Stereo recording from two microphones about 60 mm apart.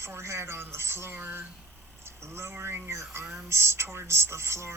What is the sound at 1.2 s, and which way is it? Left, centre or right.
Speech, right.